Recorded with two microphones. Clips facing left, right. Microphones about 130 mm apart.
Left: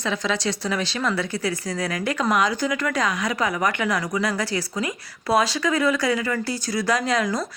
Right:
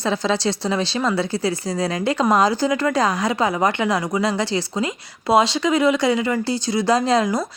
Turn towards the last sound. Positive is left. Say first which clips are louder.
# right 5 dB
turn(degrees=-25)  # may be behind; listen again after turning